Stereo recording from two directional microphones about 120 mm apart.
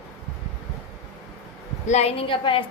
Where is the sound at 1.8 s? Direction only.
65° left (ahead or behind); by 2.6 s 45° left (ahead or behind).